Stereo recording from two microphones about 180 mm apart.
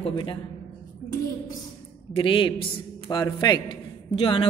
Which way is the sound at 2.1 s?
30° left (ahead or behind).